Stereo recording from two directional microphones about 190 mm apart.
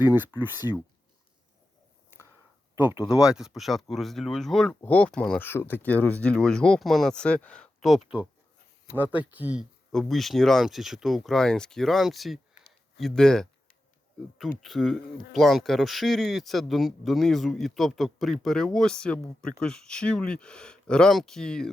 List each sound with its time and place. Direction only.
0.0 s speech: 10° right (ahead or behind)
2.7 s speech: 10° right (ahead or behind)